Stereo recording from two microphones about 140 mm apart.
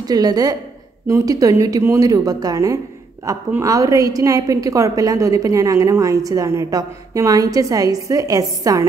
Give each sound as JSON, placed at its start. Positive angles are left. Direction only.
{"t": 0.0, "sound": "a woman's voice", "side_deg": -25}